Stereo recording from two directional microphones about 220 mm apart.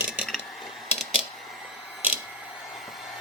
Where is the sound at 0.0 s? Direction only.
5° right (ahead or behind).